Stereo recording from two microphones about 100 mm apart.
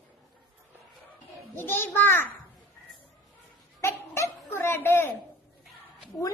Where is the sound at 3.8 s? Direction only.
30° left (ahead or behind).